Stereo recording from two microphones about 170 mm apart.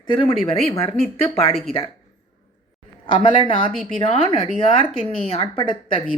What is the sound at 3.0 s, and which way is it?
A woman's voice, 30° left (ahead or behind).